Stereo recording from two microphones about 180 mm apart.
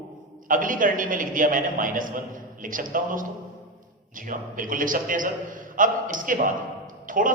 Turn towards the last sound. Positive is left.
turn(degrees=-50)  # may be behind; listen again after turning